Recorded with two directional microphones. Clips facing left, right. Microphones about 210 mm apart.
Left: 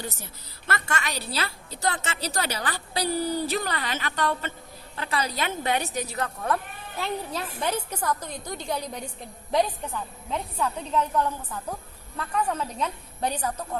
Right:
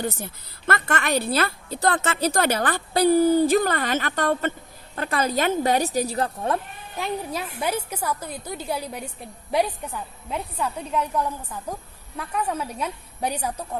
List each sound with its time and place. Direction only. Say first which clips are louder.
0.7 s a woman's voice: right 7 dB; 55° right (ahead or behind); by 6.6 s 30° right (ahead or behind)
7.0 s a woman's voice: right 2 dB; 10° right (ahead or behind)